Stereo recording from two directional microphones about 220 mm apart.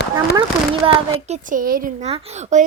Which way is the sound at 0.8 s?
30° right (ahead or behind).